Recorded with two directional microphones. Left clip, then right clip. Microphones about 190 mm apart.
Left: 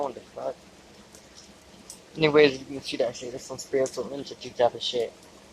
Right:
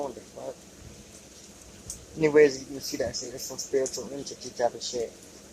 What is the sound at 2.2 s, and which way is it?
Speech, 20° left (ahead or behind).